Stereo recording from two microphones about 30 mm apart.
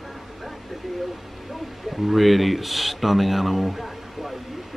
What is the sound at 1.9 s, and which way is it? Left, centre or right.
Speech, centre.